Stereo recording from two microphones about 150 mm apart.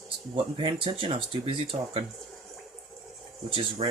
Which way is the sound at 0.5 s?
35° right (ahead or behind).